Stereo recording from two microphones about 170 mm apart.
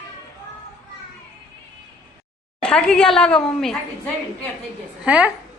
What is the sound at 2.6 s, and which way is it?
A man's voice, 5° left (ahead or behind).